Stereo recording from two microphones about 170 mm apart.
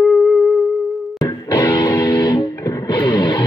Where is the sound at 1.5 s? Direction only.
20° left (ahead or behind).